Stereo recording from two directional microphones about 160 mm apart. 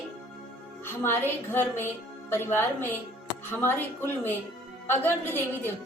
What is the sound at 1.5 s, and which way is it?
A woman's voice, 15° left (ahead or behind).